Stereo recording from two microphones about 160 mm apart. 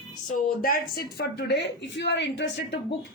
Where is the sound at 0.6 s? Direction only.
70° left (ahead or behind).